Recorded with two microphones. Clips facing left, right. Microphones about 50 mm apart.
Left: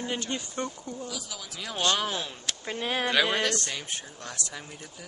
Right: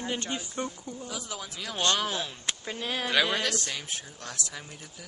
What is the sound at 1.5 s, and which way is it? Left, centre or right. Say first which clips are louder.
Speech: left 1 dB; centre.